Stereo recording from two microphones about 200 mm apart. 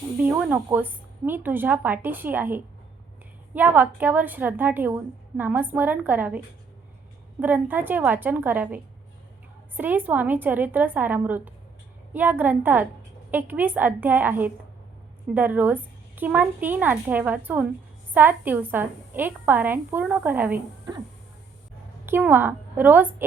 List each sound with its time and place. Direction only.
0.2 s a woman's voice: 5° right (ahead or behind)
22.0 s a woman's voice: 10° right (ahead or behind)